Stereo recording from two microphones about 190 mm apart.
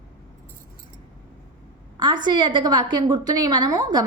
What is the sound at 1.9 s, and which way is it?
A woman's voice, 25° right (ahead or behind).